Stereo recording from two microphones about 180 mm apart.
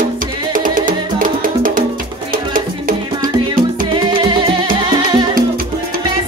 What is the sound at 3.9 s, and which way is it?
Music, 25° right (ahead or behind).